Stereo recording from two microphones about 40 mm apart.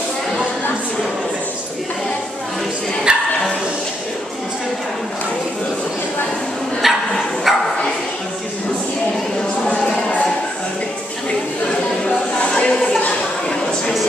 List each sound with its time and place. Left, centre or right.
3.1 s dog: right
6.8 s bow-wow: centre
12.4 s a sound: left